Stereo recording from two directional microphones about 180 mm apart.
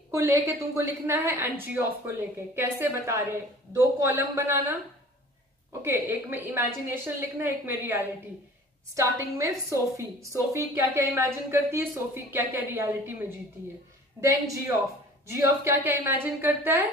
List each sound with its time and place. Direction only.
0.1 s a woman's voice: 15° right (ahead or behind)
14.2 s a woman's voice: 15° right (ahead or behind)